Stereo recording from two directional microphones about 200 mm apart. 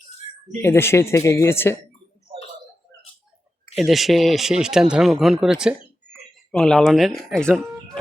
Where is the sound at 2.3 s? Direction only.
30° right (ahead or behind).